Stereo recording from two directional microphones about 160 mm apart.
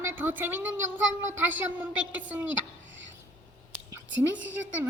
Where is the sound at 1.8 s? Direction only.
10° right (ahead or behind).